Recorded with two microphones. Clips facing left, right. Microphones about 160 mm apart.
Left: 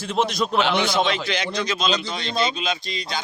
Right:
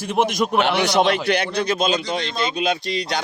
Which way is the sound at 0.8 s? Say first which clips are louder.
Right 4 dB; 70° right (ahead or behind).